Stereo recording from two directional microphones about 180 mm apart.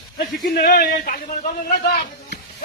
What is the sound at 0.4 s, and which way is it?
A man's voice, 55° left (ahead or behind).